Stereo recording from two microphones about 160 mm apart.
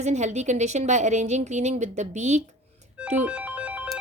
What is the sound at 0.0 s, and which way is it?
Speech, 45° right (ahead or behind).